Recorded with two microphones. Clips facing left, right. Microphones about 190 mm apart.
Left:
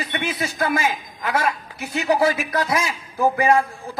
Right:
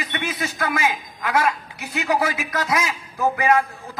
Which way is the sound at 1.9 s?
30° left (ahead or behind).